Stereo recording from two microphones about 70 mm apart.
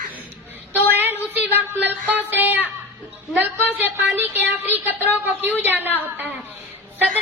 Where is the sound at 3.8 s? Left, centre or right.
Right.